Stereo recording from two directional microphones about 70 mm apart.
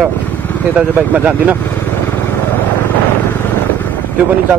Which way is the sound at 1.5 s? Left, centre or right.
Left.